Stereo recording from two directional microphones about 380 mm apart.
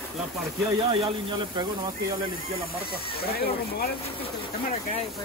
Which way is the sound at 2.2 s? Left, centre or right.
Right.